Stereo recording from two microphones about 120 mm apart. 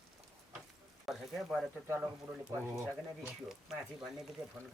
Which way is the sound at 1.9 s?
10° right (ahead or behind).